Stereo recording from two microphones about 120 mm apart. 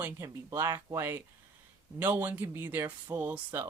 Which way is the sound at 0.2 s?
20° right (ahead or behind).